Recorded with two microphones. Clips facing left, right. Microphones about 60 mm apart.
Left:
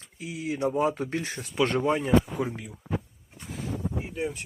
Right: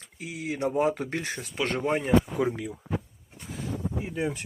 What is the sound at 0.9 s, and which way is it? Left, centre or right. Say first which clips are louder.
Speech: even; right.